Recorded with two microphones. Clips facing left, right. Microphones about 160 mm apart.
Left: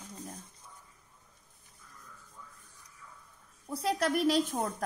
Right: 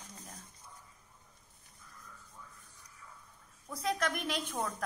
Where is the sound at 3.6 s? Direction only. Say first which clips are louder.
Left 4 dB; 30° left (ahead or behind).